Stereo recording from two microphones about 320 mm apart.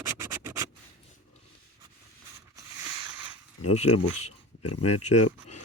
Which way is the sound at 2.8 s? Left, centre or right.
Centre.